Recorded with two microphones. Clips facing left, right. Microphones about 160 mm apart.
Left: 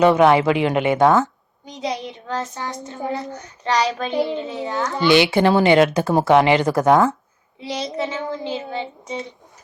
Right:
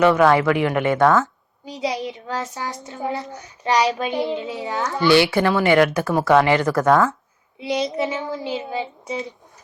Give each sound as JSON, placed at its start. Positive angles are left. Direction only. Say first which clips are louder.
{"t": 0.0, "sound": "a woman's voice", "louder": "left 1 dB", "side_deg": 20}
{"t": 1.6, "sound": "child singing", "louder": "right 2 dB", "side_deg": -5}
{"t": 3.6, "sound": "a woman's voice", "louder": "right 1 dB", "side_deg": -10}
{"t": 4.8, "sound": "a woman's voice", "louder": "even", "side_deg": 20}
{"t": 8.0, "sound": "a woman's voice", "louder": "even", "side_deg": -15}